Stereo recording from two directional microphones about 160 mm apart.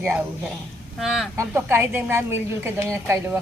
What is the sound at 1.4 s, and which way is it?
A woman's voice, 15° right (ahead or behind).